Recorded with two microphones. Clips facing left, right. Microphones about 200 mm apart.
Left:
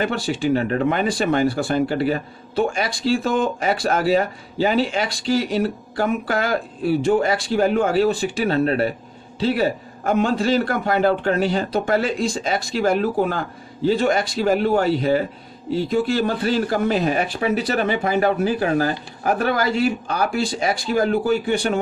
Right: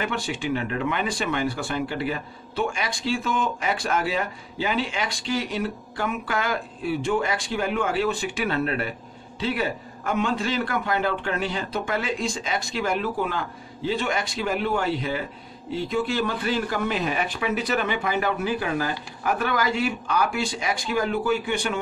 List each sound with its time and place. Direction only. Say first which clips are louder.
0.0 s speech: left 6 dB; 35° left (ahead or behind)